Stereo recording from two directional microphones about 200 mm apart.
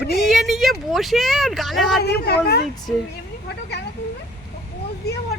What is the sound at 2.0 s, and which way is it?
Speech, 50° left (ahead or behind).